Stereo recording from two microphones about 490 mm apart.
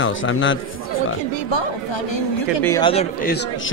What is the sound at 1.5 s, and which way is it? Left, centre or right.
Speech, left.